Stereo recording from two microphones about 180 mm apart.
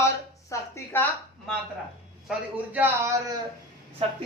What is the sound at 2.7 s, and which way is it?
Speech, 15° right (ahead or behind).